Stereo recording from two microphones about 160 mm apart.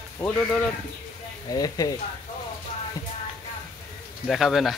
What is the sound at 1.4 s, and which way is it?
Speech, 25° left (ahead or behind).